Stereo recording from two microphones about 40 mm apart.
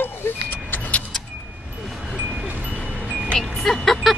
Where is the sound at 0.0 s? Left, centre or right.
Left.